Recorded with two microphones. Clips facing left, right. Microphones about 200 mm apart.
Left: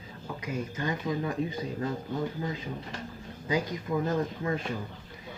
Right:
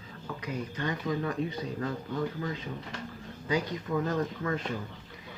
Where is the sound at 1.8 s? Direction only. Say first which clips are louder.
Even; 25° left (ahead or behind).